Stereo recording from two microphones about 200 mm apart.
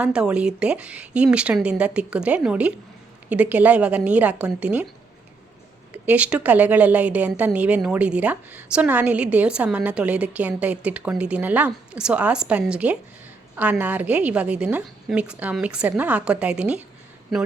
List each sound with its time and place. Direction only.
0.0 s a woman's voice: 5° right (ahead or behind)
5.9 s a woman's voice: 5° right (ahead or behind)